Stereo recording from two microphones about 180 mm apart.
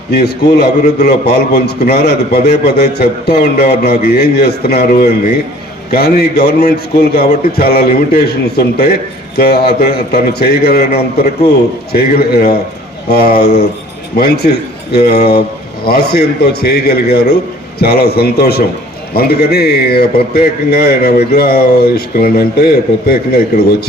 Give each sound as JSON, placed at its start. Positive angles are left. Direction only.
{"t": 0.1, "sound": "a man's voice", "side_deg": 60}